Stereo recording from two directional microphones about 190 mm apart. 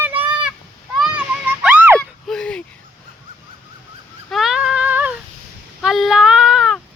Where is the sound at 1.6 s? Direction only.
10° right (ahead or behind).